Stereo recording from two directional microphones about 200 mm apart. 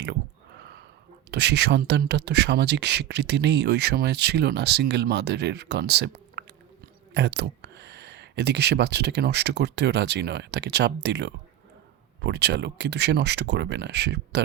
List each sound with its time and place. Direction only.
1.3 s speech: 55° right (ahead or behind)